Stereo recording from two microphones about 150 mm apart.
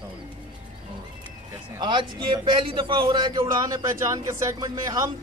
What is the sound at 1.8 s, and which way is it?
A man's voice, 30° right (ahead or behind).